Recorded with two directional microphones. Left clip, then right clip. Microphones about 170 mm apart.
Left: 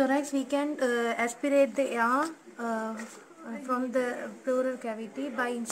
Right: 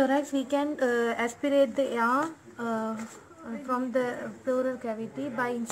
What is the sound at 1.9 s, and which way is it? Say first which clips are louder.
Speech: right 1 dB; 5° right (ahead or behind).